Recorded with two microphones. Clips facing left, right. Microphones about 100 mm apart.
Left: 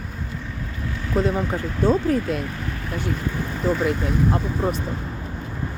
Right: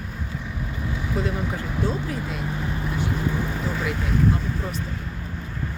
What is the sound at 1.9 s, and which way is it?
Speech, 50° left (ahead or behind).